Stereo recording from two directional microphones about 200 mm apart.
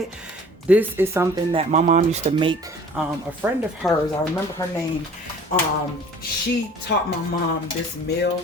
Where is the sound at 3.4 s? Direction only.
10° right (ahead or behind).